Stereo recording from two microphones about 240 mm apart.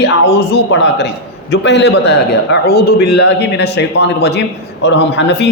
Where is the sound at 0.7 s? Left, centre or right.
Left.